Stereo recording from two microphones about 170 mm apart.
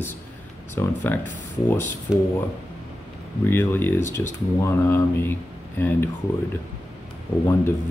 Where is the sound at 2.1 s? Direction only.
5° right (ahead or behind).